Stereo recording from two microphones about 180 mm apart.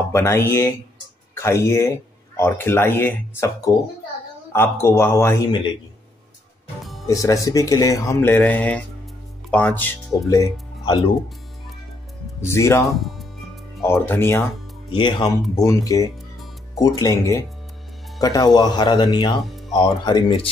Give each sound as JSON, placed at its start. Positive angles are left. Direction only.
{"t": 0.1, "sound": "speech", "side_deg": 15}
{"t": 7.1, "sound": "speech", "side_deg": 20}
{"t": 12.4, "sound": "speech", "side_deg": 15}
{"t": 12.8, "sound": "speech", "side_deg": 0}
{"t": 13.8, "sound": "speech", "side_deg": 15}
{"t": 14.9, "sound": "speech", "side_deg": 25}